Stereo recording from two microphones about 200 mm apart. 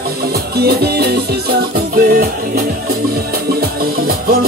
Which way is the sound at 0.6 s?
50° right (ahead or behind).